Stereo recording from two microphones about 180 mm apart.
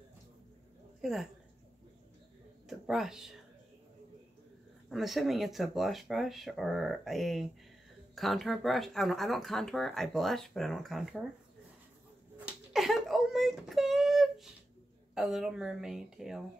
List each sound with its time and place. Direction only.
1.0 s speech: centre (ahead or behind)
2.7 s speech: centre (ahead or behind)
4.8 s speech: centre (ahead or behind)
12.4 s a sound: 5° right (ahead or behind)
15.1 s speech: centre (ahead or behind)